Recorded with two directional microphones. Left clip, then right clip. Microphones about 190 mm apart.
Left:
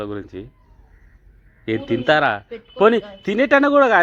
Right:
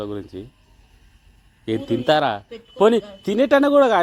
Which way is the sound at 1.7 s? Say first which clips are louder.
Left 1 dB; 15° right (ahead or behind).